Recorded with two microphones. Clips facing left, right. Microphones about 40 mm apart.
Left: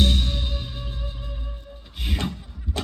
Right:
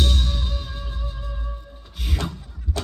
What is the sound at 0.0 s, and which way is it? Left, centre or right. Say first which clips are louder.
Music: left 2 dB; left.